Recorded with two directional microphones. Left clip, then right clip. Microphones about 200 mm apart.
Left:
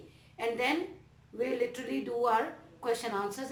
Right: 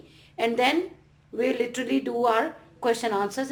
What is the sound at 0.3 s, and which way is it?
A woman's voice, 50° right (ahead or behind).